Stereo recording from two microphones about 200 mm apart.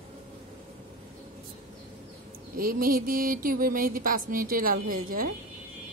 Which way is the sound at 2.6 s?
45° right (ahead or behind).